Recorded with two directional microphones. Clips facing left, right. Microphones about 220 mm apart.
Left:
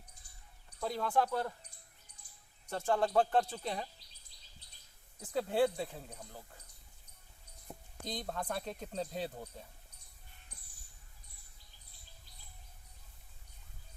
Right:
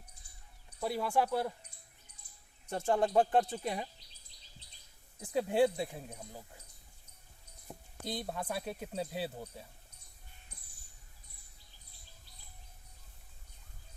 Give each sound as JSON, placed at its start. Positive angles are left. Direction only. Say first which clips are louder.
{"t": 0.8, "sound": "speech", "louder": "right 1 dB", "side_deg": -10}
{"t": 2.6, "sound": "speech", "louder": "right 2 dB", "side_deg": -20}
{"t": 5.2, "sound": "speech", "louder": "right 2 dB", "side_deg": -15}
{"t": 7.7, "sound": "speech", "louder": "right 2 dB", "side_deg": -5}